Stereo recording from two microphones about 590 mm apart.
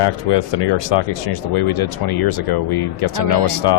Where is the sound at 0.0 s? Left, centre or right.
Left.